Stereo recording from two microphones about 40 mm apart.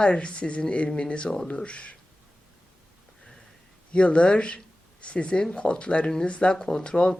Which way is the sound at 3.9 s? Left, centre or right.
Left.